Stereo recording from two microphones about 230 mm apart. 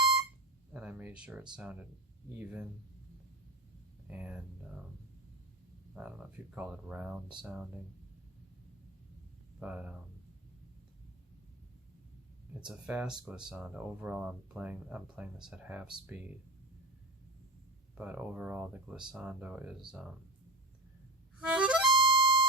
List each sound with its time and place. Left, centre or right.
0.7 s a sound: centre
1.5 s speech: centre
4.1 s speech: centre
5.9 s speech: centre
9.6 s speech: centre
12.5 s speech: centre
17.9 s speech: centre
21.4 s harmonica: centre
21.8 s harmonica: right